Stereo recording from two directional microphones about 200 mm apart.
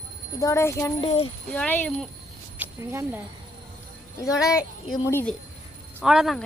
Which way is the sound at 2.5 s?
10° right (ahead or behind).